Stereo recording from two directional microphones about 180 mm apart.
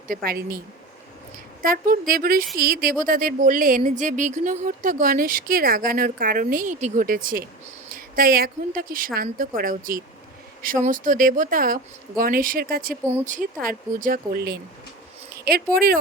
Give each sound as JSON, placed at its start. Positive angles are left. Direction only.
{"t": 0.1, "sound": "speech", "side_deg": -55}
{"t": 1.6, "sound": "speech", "side_deg": -50}